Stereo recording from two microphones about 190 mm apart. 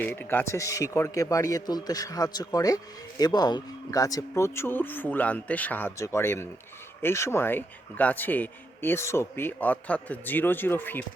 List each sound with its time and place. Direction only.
0.0 s speech: 10° left (ahead or behind)